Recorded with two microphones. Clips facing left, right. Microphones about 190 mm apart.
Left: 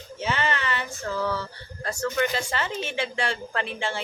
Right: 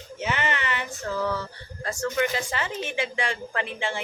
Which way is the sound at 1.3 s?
15° right (ahead or behind).